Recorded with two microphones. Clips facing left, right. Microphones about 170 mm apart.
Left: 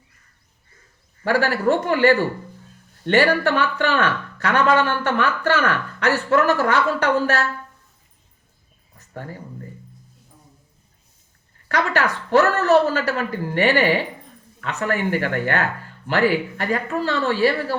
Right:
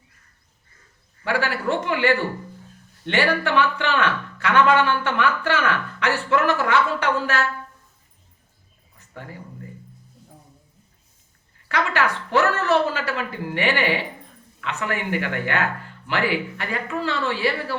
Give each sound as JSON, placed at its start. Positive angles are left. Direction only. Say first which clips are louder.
{"t": 1.2, "sound": "speech", "louder": "left 5 dB", "side_deg": 40}
{"t": 9.0, "sound": "a sound", "louder": "left 4 dB", "side_deg": 40}
{"t": 11.7, "sound": "speech", "louder": "left 1 dB", "side_deg": 40}